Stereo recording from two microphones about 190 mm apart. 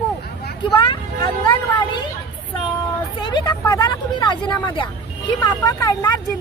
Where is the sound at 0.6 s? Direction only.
25° left (ahead or behind).